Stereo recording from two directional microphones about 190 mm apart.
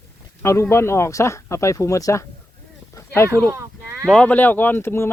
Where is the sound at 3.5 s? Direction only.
15° right (ahead or behind).